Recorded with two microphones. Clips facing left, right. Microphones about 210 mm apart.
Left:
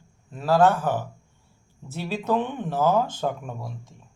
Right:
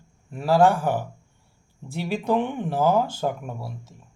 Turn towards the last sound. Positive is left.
turn(degrees=-5)  # may be behind; listen again after turning